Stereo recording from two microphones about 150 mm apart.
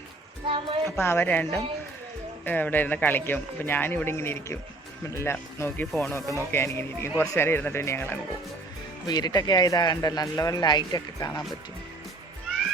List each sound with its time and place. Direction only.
0.4 s a woman's voice: 35° right (ahead or behind)
0.9 s speech: 15° left (ahead or behind)
9.0 s speech: 25° left (ahead or behind)